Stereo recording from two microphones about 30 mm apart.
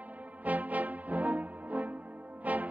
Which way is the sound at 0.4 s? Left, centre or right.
Right.